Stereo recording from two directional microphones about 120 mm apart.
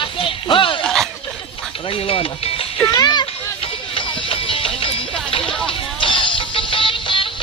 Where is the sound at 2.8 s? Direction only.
35° left (ahead or behind).